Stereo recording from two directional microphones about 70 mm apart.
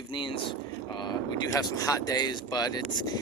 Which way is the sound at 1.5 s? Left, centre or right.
Left.